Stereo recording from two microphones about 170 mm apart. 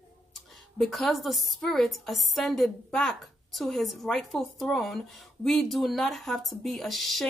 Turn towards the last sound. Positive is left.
turn(degrees=0)  # may be behind; listen again after turning